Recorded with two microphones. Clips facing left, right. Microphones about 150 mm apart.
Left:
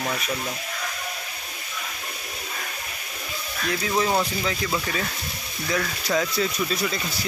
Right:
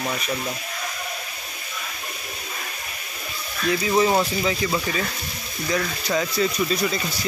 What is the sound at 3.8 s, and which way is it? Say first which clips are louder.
Speech: right 3 dB; 5° right (ahead or behind).